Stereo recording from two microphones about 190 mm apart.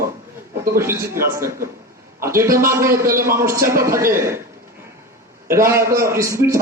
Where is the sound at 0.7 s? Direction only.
15° right (ahead or behind).